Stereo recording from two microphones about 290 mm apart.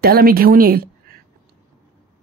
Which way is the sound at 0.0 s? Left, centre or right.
Right.